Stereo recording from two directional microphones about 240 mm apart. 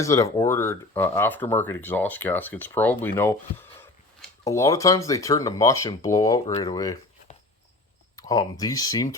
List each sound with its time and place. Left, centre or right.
0.0 s speech: centre
8.1 s speech: centre